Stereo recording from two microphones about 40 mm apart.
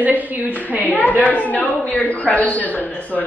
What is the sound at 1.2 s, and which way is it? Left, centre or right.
A woman's voice, left.